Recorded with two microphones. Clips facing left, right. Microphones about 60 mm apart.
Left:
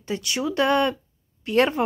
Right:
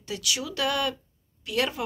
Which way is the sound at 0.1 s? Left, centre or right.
Left.